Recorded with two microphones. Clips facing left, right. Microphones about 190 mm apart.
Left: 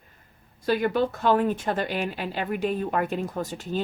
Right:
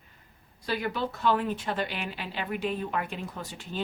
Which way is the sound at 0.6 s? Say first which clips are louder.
Left 7 dB; 50° left (ahead or behind).